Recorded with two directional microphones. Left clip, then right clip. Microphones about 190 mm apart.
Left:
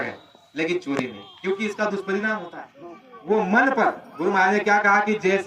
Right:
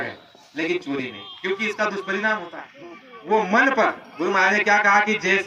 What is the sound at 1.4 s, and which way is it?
A man's voice, 35° left (ahead or behind).